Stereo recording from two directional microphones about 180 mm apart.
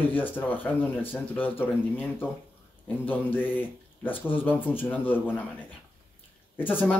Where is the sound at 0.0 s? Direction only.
10° left (ahead or behind).